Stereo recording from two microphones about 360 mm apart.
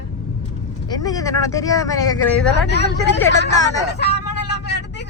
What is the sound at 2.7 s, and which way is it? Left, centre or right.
Speech, left.